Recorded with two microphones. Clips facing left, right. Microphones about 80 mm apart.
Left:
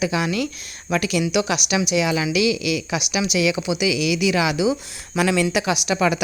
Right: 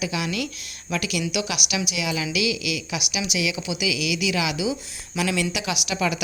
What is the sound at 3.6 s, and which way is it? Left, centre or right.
A woman's voice, left.